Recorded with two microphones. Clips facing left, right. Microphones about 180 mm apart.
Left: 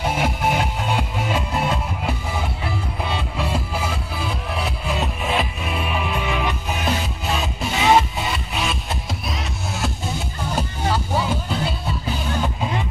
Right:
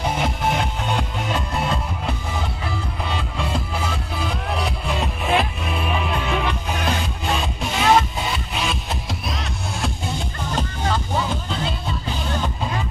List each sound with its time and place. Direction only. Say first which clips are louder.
0.0 s music: left 1 dB; 5° left (ahead or behind)
3.2 s music: left 1 dB; 5° left (ahead or behind)